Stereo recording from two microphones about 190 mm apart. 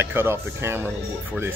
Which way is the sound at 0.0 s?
10° right (ahead or behind).